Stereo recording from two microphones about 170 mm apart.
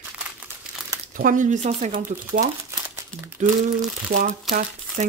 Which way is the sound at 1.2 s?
50° right (ahead or behind).